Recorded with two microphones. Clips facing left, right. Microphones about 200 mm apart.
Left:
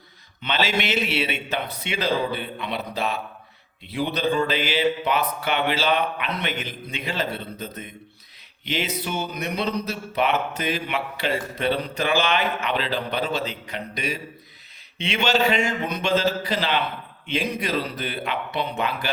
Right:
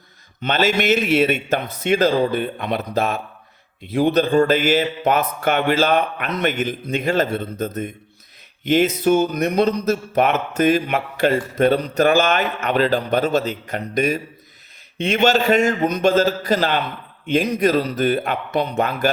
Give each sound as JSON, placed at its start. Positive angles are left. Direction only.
{"t": 0.4, "sound": "speech", "side_deg": -45}